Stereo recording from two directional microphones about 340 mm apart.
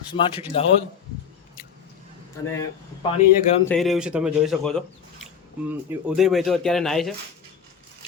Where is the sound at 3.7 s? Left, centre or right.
Centre.